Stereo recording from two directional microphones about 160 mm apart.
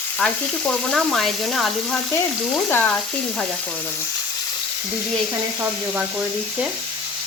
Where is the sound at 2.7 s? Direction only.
10° left (ahead or behind).